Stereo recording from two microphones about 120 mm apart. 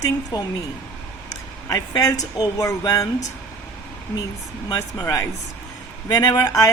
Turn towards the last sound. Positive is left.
turn(degrees=30)  # may be behind; listen again after turning